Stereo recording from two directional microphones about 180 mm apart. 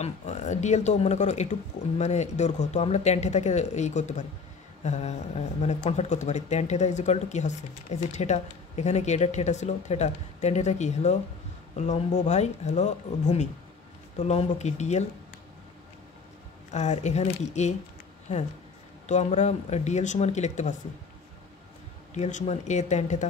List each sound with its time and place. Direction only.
0.0 s speech: 40° left (ahead or behind)
16.7 s speech: 40° left (ahead or behind)
19.0 s speech: 40° left (ahead or behind)
22.1 s speech: 40° left (ahead or behind)